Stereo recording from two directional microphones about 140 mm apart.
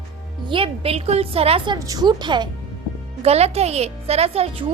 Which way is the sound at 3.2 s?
45° right (ahead or behind).